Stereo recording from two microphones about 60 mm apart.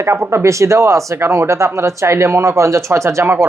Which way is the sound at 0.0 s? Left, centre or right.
Right.